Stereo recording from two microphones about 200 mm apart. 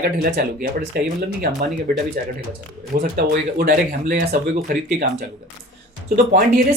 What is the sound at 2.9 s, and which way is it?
Speech, 30° right (ahead or behind).